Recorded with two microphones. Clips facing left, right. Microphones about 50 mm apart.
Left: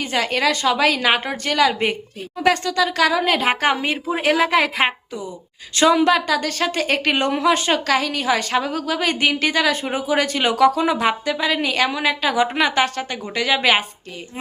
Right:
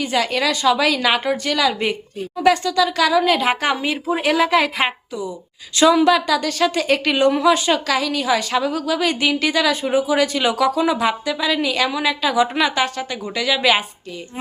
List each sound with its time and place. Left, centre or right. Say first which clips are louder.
0.0 s a woman's voice: even; left